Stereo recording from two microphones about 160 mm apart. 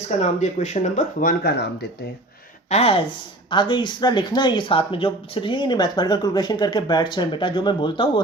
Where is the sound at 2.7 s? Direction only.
40° left (ahead or behind).